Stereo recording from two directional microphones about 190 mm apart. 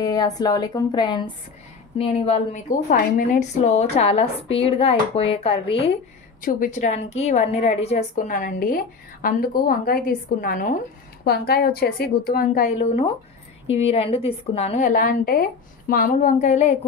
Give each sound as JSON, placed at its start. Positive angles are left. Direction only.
{"t": 0.0, "sound": "a woman's voice", "side_deg": 20}
{"t": 6.4, "sound": "a woman's voice", "side_deg": 45}